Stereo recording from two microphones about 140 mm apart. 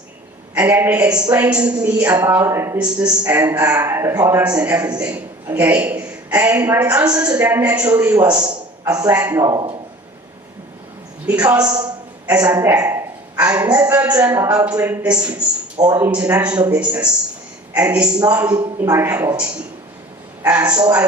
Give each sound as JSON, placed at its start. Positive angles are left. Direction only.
{"t": 0.5, "sound": "a woman's voice", "side_deg": -10}
{"t": 2.7, "sound": "a woman's voice", "side_deg": -10}
{"t": 11.3, "sound": "a woman's voice", "side_deg": -10}
{"t": 12.5, "sound": "a sound", "side_deg": -25}
{"t": 13.4, "sound": "a woman's voice", "side_deg": -10}
{"t": 16.6, "sound": "a woman's voice", "side_deg": -25}
{"t": 16.8, "sound": "a woman's voice", "side_deg": -10}
{"t": 18.5, "sound": "a woman's voice", "side_deg": -25}
{"t": 20.5, "sound": "a woman's voice", "side_deg": -10}